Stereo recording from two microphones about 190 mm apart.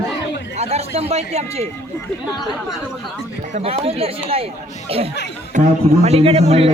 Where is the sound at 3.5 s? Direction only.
30° right (ahead or behind).